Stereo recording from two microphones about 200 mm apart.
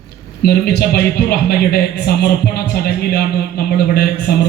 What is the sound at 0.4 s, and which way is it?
A man's voice, 50° left (ahead or behind).